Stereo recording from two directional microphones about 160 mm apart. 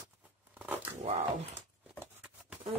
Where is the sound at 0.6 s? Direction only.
10° right (ahead or behind).